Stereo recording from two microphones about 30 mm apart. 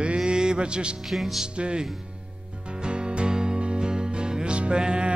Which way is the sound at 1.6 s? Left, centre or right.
Right.